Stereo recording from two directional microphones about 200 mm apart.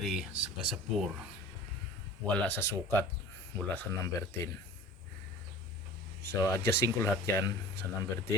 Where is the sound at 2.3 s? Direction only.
5° left (ahead or behind).